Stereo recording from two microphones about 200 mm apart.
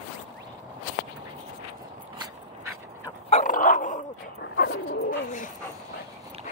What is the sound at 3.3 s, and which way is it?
Dog, 40° left (ahead or behind).